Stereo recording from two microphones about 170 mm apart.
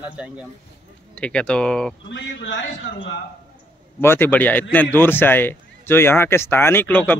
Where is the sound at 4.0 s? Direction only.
10° left (ahead or behind).